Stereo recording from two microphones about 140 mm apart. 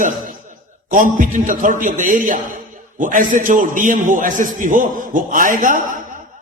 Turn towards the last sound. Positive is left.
turn(degrees=-70)  # may be behind; listen again after turning